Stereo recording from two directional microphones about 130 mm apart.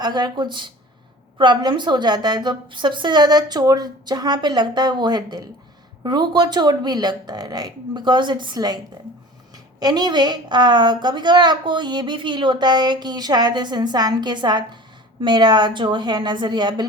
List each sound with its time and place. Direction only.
0.0 s a woman's voice: 35° right (ahead or behind)
9.8 s a woman's voice: 35° right (ahead or behind)